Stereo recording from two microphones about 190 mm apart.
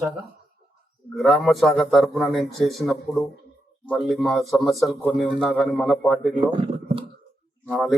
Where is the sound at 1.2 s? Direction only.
Centre (ahead or behind).